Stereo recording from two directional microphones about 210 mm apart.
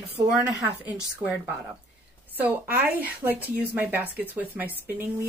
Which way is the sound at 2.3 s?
10° right (ahead or behind).